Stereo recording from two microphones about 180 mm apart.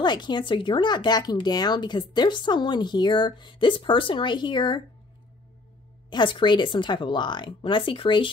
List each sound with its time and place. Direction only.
0.0 s speech: 25° left (ahead or behind)
6.0 s speech: 25° left (ahead or behind)